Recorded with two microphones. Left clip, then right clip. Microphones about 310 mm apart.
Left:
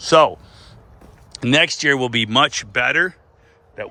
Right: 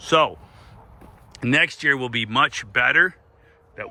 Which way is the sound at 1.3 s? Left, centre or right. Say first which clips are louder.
Left 3 dB; centre.